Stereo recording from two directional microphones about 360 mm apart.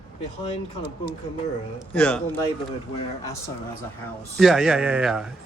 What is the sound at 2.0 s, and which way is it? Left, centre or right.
Speech, centre.